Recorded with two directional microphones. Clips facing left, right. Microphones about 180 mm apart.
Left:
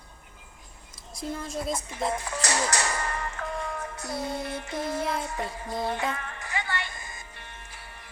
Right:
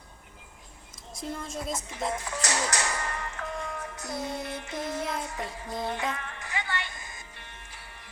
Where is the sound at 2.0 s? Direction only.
35° left (ahead or behind).